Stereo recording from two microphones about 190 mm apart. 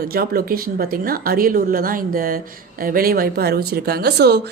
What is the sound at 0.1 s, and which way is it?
A woman's voice, 50° right (ahead or behind).